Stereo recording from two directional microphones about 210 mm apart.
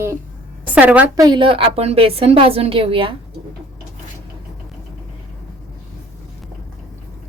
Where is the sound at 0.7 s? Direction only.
5° right (ahead or behind); by 3.2 s 25° right (ahead or behind).